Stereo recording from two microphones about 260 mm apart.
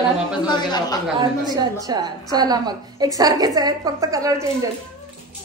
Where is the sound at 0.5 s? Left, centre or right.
Centre.